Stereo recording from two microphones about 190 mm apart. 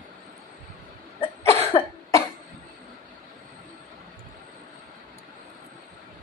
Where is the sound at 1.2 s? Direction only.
35° left (ahead or behind).